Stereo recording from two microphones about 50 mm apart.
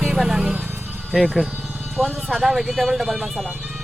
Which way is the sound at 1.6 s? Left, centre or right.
Centre.